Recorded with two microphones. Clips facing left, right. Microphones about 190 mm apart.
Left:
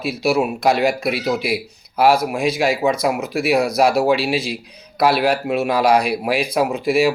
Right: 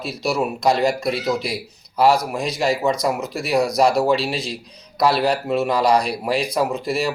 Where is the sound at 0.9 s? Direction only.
60° left (ahead or behind).